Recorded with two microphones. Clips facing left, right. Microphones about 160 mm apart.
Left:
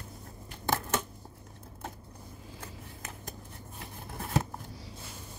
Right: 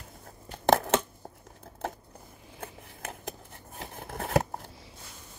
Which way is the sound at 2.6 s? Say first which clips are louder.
Right 6 dB; 60° right (ahead or behind).